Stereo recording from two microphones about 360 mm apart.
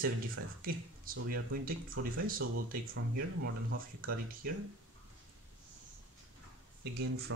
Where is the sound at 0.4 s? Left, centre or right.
Right.